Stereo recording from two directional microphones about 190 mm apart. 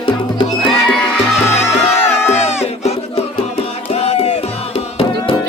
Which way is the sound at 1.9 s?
15° left (ahead or behind).